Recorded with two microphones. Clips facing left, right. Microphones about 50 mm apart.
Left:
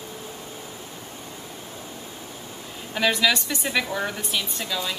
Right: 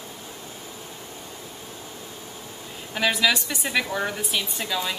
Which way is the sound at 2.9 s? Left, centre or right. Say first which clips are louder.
Left 1 dB; centre.